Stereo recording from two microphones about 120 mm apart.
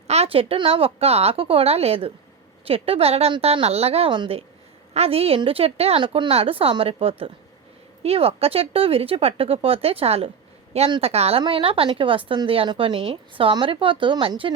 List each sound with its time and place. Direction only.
0.1 s a woman's voice: 55° right (ahead or behind)